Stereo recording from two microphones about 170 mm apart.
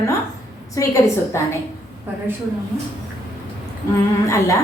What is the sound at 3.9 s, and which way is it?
Speech, 15° left (ahead or behind).